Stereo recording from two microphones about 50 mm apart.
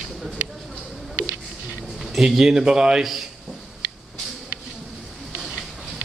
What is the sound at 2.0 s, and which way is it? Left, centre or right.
A man's voice, centre.